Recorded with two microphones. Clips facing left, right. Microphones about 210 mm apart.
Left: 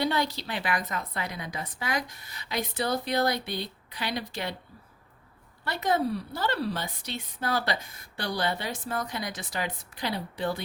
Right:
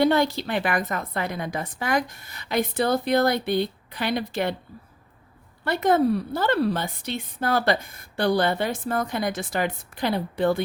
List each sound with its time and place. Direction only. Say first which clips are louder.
0.0 s a woman's voice: right 8 dB; 50° right (ahead or behind)
5.6 s a woman's voice: right 7 dB; 55° right (ahead or behind)